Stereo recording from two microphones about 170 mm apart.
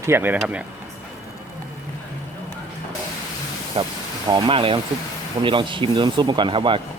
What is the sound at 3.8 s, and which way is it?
A man's voice, 35° right (ahead or behind).